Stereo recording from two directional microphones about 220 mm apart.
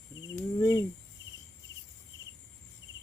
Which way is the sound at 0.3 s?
15° left (ahead or behind).